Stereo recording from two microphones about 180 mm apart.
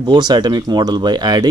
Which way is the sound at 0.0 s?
25° right (ahead or behind).